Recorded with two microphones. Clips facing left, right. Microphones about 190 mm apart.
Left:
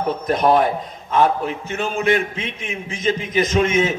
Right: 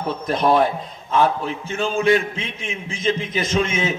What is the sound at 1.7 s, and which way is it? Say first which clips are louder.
A man's voice: right 2 dB; 30° right (ahead or behind).